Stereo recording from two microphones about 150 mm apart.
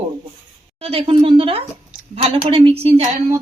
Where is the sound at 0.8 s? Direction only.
40° right (ahead or behind).